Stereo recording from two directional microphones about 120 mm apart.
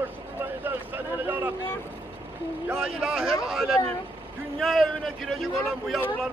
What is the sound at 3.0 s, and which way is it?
A man's voice, centre (ahead or behind).